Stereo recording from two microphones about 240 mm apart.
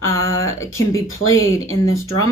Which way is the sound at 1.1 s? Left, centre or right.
Left.